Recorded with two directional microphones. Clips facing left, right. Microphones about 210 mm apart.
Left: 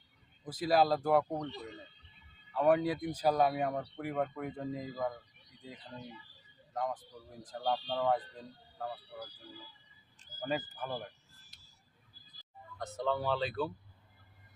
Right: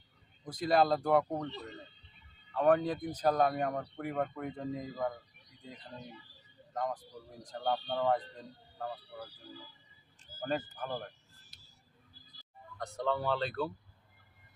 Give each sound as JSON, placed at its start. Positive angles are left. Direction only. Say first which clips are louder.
{"t": 0.4, "sound": "speech", "louder": "even", "side_deg": 5}
{"t": 2.5, "sound": "speech", "louder": "even", "side_deg": 10}
{"t": 10.4, "sound": "speech", "louder": "right 1 dB", "side_deg": 10}
{"t": 12.8, "sound": "speech", "louder": "even", "side_deg": 0}